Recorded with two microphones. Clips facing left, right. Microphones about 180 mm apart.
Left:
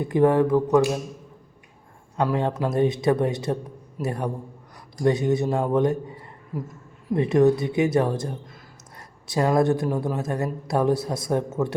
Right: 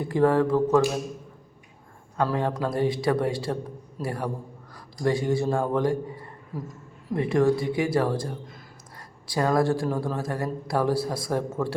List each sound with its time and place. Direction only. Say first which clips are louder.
0.0 s speech: left 2 dB; 20° left (ahead or behind)
2.1 s a man's voice: left 2 dB; 20° left (ahead or behind)